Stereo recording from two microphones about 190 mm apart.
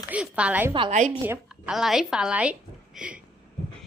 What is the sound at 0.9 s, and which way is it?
Speech, 40° right (ahead or behind).